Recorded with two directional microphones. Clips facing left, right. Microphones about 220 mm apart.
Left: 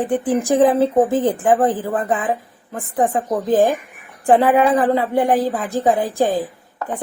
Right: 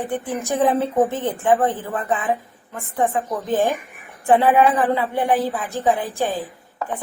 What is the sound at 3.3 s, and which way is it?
Speech, 40° left (ahead or behind).